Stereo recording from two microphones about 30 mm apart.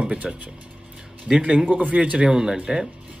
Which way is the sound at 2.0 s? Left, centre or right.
Right.